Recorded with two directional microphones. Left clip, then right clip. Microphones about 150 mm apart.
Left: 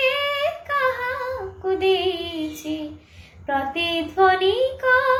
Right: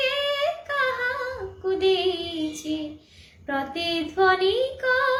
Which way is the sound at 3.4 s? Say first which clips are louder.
Left 4 dB; 25° right (ahead or behind).